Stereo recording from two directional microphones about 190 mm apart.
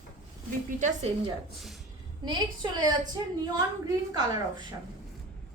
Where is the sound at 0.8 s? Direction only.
40° right (ahead or behind).